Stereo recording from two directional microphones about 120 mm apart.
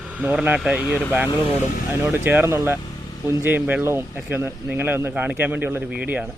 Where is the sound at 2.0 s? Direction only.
15° right (ahead or behind).